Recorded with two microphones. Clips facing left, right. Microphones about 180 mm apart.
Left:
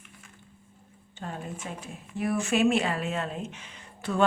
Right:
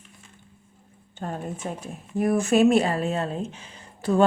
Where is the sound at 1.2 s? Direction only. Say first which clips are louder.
Right 6 dB; 45° right (ahead or behind).